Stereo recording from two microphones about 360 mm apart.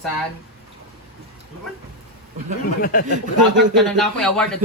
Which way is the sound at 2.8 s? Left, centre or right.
Left.